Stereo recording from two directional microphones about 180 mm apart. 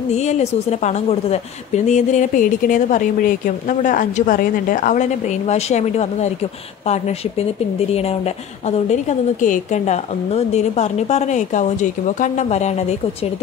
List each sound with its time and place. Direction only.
0.1 s a woman's voice: 40° left (ahead or behind)